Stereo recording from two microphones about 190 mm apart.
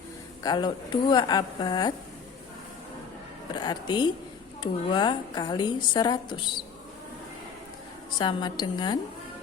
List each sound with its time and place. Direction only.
0.4 s a woman's voice: 25° left (ahead or behind)
3.5 s a woman's voice: 20° left (ahead or behind)
8.2 s a woman's voice: 25° left (ahead or behind)